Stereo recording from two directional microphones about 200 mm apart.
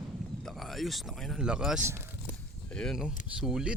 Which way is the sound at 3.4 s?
5° right (ahead or behind).